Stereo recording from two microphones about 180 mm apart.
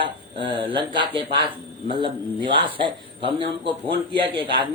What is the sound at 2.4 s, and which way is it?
Speech, 25° right (ahead or behind).